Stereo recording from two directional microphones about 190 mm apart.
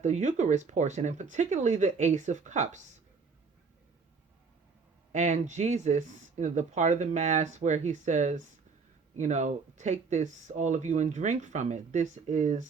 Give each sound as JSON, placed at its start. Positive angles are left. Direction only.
{"t": 0.0, "sound": "speech", "side_deg": -40}
{"t": 5.1, "sound": "speech", "side_deg": -40}